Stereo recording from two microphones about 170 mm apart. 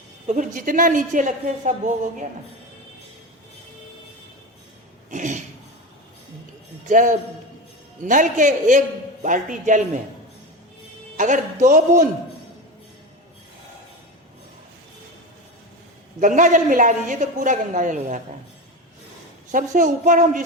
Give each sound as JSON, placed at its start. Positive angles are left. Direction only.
{"t": 0.3, "sound": "a woman's voice", "side_deg": -50}
{"t": 5.1, "sound": "a sound", "side_deg": -45}
{"t": 6.8, "sound": "a woman's voice", "side_deg": -45}
{"t": 11.2, "sound": "a woman's voice", "side_deg": -45}
{"t": 16.2, "sound": "a woman's voice", "side_deg": -50}
{"t": 19.5, "sound": "a woman's voice", "side_deg": -50}